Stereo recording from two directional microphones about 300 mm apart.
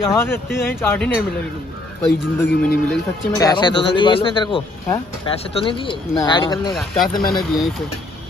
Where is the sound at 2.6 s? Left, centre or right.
Centre.